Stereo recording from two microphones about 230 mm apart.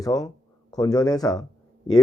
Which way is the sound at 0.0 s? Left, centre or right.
Centre.